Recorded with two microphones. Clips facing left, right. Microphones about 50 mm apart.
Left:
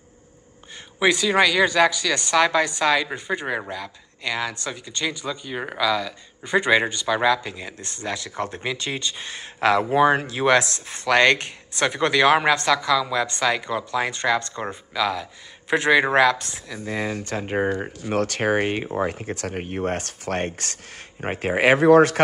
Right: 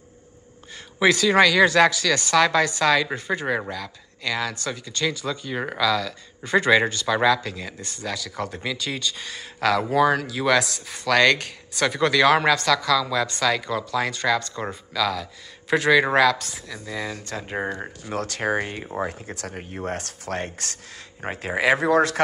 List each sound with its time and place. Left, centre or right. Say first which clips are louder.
0.9 s speech: right 1 dB; centre
7.8 s speech: left 2 dB; left
17.6 s speech: left 5 dB; centre
18.1 s speech: left 3 dB; left
21.2 s speech: left 4 dB; left